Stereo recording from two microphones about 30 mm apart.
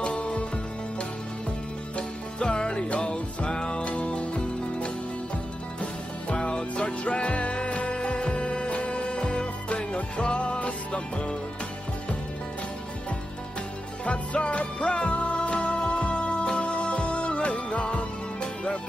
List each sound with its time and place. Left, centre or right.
0.0 s music: left
2.0 s music: left
3.8 s music: left
7.9 s music: left
9.2 s music: left
9.7 s music: left
14.0 s music: left
18.4 s music: left